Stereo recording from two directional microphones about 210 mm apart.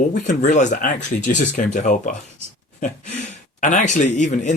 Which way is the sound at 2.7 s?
35° left (ahead or behind).